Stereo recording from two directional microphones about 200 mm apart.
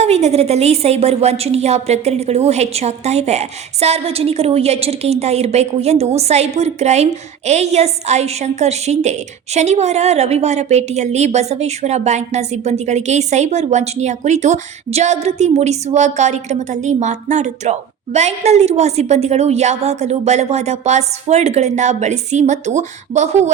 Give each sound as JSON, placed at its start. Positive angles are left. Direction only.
{"t": 0.0, "sound": "a woman's voice", "side_deg": -30}